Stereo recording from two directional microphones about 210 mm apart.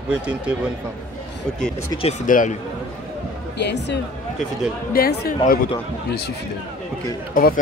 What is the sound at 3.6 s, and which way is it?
Speech, 55° left (ahead or behind).